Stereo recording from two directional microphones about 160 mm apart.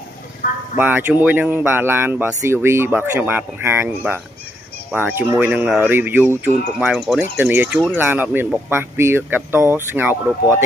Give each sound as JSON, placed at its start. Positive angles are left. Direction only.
{"t": 0.4, "sound": "speech", "side_deg": 65}
{"t": 0.7, "sound": "speech", "side_deg": -10}
{"t": 7.2, "sound": "speech", "side_deg": -10}